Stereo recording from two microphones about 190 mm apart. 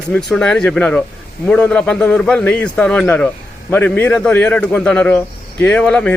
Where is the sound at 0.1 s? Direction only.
5° left (ahead or behind).